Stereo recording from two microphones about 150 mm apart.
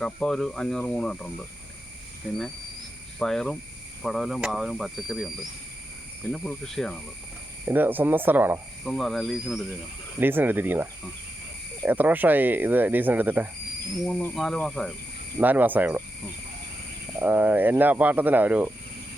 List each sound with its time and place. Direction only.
0.0 s speech: 5° left (ahead or behind)
3.2 s speech: 5° left (ahead or behind)
6.3 s speech: centre (ahead or behind)
7.6 s speech: 15° right (ahead or behind)
8.8 s speech: centre (ahead or behind)
10.2 s speech: 15° right (ahead or behind)
11.9 s speech: 10° right (ahead or behind)
14.0 s speech: 10° left (ahead or behind)
15.4 s speech: 10° right (ahead or behind)
17.2 s speech: 10° right (ahead or behind)